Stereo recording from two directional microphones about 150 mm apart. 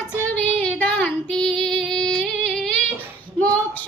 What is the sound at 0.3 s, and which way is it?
Female singing, 10° left (ahead or behind).